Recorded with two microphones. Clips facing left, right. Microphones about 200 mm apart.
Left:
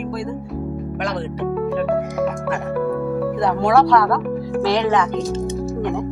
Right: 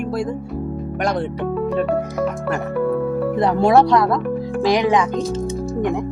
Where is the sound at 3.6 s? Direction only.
20° right (ahead or behind).